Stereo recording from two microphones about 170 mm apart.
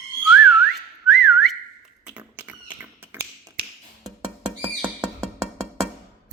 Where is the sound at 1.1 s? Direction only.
Centre (ahead or behind).